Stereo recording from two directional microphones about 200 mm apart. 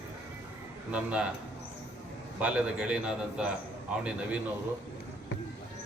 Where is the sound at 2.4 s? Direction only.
5° right (ahead or behind).